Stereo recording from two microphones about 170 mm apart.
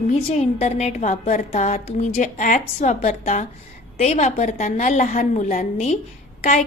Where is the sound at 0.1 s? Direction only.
40° left (ahead or behind).